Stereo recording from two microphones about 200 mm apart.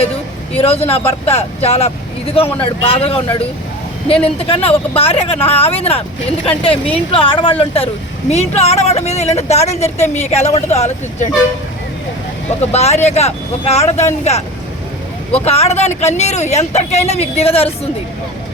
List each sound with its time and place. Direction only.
0.5 s a woman's voice: 30° left (ahead or behind)
12.5 s a woman's voice: 35° left (ahead or behind)
15.4 s a woman's voice: 30° left (ahead or behind)